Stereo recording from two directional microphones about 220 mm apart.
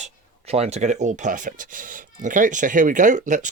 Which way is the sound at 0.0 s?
30° right (ahead or behind).